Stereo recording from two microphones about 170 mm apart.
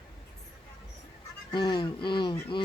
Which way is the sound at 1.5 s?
25° left (ahead or behind).